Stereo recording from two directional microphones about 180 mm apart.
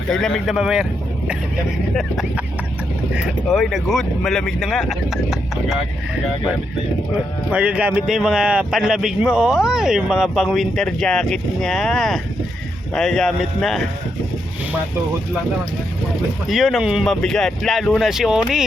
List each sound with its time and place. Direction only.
0.1 s a man's voice: 5° left (ahead or behind)
2.0 s a man's voice: centre (ahead or behind)
7.5 s a man's voice: 5° right (ahead or behind)
16.5 s a man's voice: centre (ahead or behind)